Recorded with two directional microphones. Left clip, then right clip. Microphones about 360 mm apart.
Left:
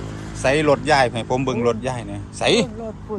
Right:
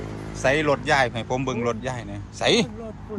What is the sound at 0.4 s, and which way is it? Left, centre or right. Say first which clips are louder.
A man's voice: left 4 dB; centre.